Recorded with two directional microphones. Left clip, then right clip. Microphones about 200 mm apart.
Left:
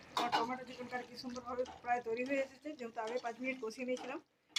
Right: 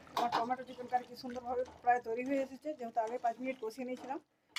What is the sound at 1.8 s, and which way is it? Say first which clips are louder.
Speech: right 5 dB; 50° right (ahead or behind).